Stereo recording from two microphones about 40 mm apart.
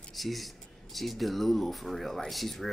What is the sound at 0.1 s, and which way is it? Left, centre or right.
A man's voice, centre.